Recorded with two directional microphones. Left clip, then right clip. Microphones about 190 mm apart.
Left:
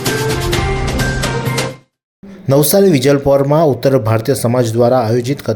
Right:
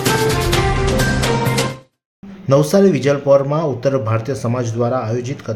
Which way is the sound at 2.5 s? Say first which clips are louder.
Left 2 dB; 20° left (ahead or behind).